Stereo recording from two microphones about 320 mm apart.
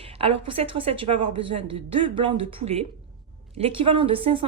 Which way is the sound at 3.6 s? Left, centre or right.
Centre.